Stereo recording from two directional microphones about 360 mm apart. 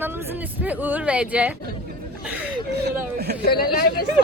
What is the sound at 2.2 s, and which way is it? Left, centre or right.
Chuckle, centre.